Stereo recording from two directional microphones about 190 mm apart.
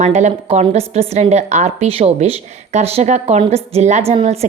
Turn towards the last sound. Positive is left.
turn(degrees=-35)  # may be behind; listen again after turning